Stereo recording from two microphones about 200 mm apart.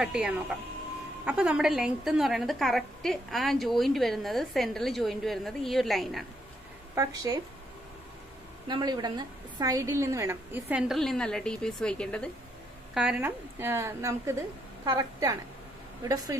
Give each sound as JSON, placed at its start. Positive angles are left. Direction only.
{"t": 0.0, "sound": "a woman's voice", "side_deg": -5}
{"t": 7.0, "sound": "a woman's voice", "side_deg": -15}
{"t": 8.6, "sound": "a woman's voice", "side_deg": -20}
{"t": 12.9, "sound": "a woman's voice", "side_deg": -5}